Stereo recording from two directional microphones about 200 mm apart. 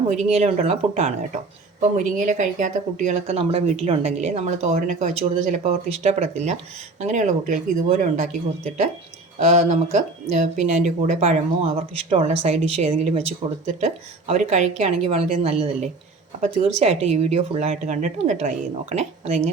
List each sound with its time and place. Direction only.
0.1 s speech: 30° right (ahead or behind)
9.4 s speech: 35° right (ahead or behind)